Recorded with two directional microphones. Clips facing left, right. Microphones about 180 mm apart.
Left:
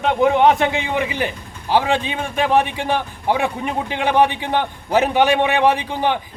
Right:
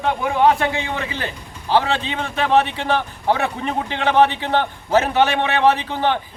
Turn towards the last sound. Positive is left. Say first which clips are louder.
# even
turn(degrees=15)  # may be behind; listen again after turning